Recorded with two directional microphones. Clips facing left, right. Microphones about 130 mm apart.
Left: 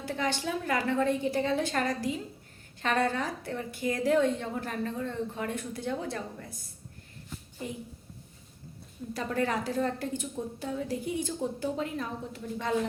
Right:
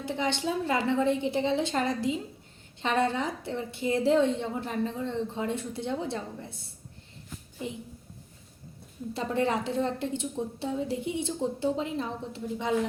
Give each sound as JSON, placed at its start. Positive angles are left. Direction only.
{"t": 0.0, "sound": "a woman's voice", "side_deg": -20}
{"t": 9.1, "sound": "a woman's voice", "side_deg": -25}